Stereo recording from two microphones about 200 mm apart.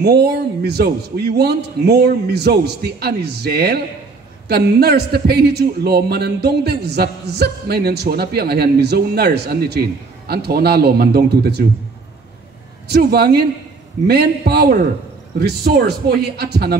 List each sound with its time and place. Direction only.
0.0 s speech: 55° right (ahead or behind)
12.8 s speech: 55° right (ahead or behind)